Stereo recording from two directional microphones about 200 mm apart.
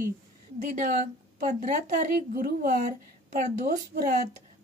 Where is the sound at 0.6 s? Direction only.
45° right (ahead or behind).